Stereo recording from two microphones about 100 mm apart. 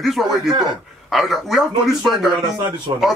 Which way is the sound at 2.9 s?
50° right (ahead or behind).